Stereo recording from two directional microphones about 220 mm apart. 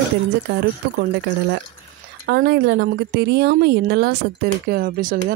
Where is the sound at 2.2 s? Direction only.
45° right (ahead or behind).